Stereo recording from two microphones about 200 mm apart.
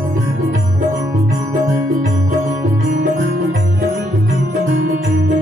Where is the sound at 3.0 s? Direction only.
50° right (ahead or behind).